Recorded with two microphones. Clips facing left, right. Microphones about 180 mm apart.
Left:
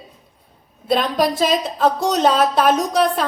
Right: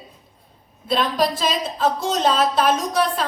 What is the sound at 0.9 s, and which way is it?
A woman's voice, 55° left (ahead or behind).